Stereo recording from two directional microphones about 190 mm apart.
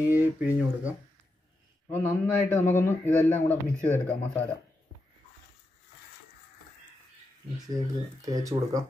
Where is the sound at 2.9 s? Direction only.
10° left (ahead or behind).